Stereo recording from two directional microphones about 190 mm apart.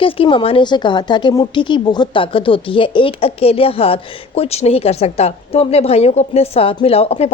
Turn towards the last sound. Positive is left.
turn(degrees=30)  # may be behind; listen again after turning